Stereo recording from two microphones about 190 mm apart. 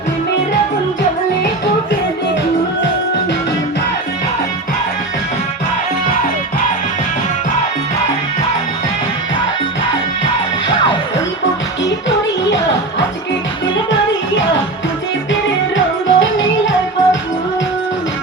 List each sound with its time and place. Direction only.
11.8 s music: 70° left (ahead or behind)
15.3 s music: 90° left